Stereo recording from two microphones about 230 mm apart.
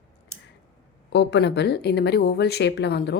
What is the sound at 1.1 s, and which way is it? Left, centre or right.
A woman's voice, left.